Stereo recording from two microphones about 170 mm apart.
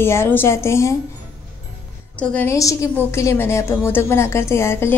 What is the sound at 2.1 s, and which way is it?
A woman's voice, 10° left (ahead or behind).